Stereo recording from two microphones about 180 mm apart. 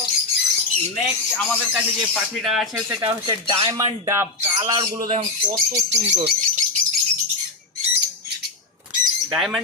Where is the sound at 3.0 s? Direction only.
30° right (ahead or behind).